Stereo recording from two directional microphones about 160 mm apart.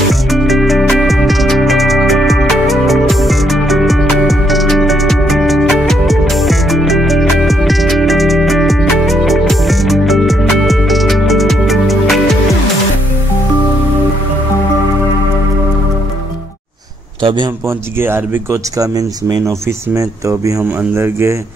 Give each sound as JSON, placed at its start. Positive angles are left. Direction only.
{"t": 0.1, "sound": "music", "side_deg": 0}
{"t": 17.2, "sound": "a sound", "side_deg": -30}
{"t": 17.6, "sound": "speech", "side_deg": -15}